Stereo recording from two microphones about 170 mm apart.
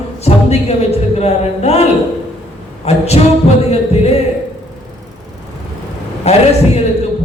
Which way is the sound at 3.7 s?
35° left (ahead or behind).